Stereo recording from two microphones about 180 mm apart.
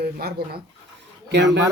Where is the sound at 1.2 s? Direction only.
75° right (ahead or behind).